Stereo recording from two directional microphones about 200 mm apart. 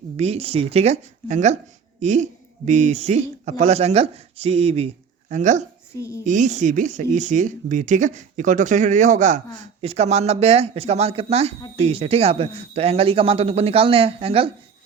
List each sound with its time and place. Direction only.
0.2 s speech: 30° right (ahead or behind)
5.9 s speech: 15° left (ahead or behind)
6.2 s a man's voice: 40° right (ahead or behind)